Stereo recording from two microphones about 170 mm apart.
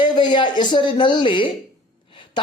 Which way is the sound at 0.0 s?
25° left (ahead or behind).